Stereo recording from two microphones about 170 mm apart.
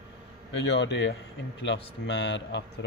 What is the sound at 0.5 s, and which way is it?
Speech, 90° left.